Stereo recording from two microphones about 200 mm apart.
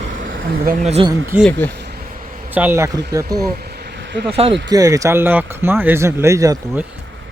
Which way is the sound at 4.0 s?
60° right (ahead or behind).